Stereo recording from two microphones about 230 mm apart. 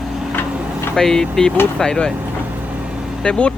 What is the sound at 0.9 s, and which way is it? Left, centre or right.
Speech, centre.